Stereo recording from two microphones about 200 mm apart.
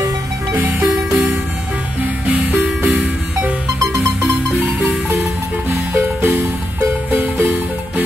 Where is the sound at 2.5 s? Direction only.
10° right (ahead or behind).